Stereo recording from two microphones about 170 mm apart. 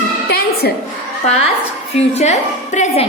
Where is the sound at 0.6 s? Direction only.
65° left (ahead or behind).